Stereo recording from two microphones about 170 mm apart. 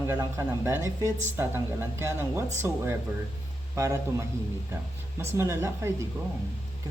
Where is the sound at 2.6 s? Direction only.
15° right (ahead or behind).